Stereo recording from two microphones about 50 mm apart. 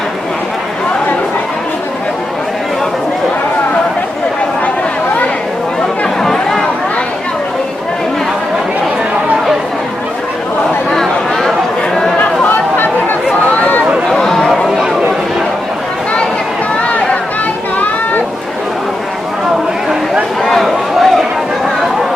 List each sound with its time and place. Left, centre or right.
6.2 s chatter: centre
10.9 s chatter: centre
12.5 s chatter: left
14.1 s chatter: centre
20.5 s a sound: centre